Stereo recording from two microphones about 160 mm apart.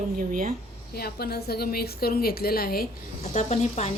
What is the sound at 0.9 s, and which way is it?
A woman's voice, 75° left (ahead or behind).